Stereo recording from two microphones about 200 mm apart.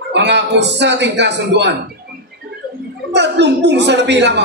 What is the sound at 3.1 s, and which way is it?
A woman's voice, 60° right (ahead or behind).